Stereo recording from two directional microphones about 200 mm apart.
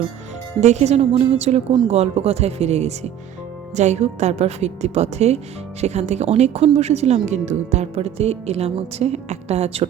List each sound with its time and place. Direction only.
0.6 s speech: 35° right (ahead or behind)